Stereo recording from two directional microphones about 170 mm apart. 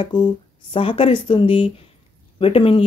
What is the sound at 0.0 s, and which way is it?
Speech, 25° left (ahead or behind).